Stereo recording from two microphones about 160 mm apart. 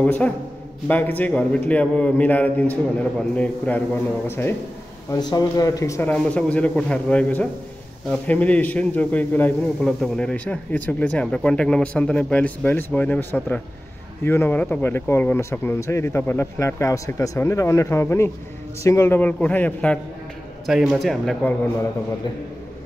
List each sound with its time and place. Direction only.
0.0 s a man's voice: 10° left (ahead or behind)
5.1 s a man's voice: 25° left (ahead or behind); by 20.0 s 10° left (ahead or behind)
20.6 s speech: centre (ahead or behind)